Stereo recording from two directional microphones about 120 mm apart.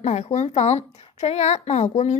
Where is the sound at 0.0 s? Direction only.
70° left (ahead or behind).